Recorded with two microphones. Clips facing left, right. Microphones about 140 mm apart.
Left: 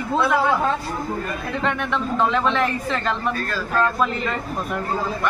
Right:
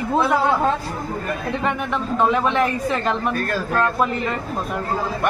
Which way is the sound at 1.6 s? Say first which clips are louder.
Left 1 dB; 15° right (ahead or behind).